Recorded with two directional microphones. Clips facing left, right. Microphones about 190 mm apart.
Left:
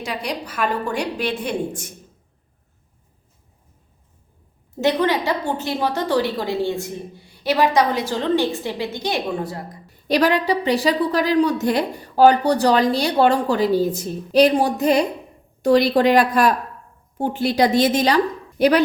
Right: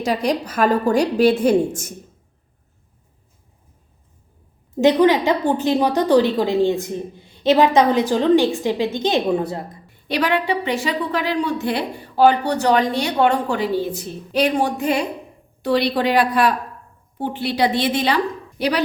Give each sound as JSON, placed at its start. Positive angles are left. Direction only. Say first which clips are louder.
{"t": 0.3, "sound": "a woman's voice", "louder": "right 5 dB", "side_deg": -45}
{"t": 4.8, "sound": "a woman's voice", "louder": "right 5 dB", "side_deg": -15}
{"t": 9.8, "sound": "a woman's voice", "louder": "left 5 dB", "side_deg": 40}